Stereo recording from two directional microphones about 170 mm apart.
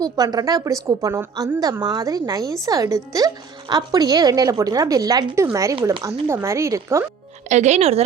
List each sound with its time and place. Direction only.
0.0 s a woman's voice: 20° right (ahead or behind)
7.4 s speech: 45° right (ahead or behind)